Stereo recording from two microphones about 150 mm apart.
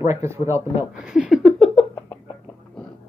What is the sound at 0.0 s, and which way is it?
Speech, 15° right (ahead or behind).